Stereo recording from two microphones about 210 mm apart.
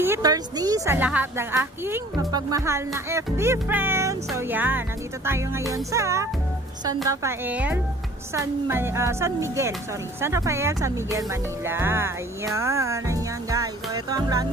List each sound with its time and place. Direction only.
0.0 s a woman's voice: 15° right (ahead or behind)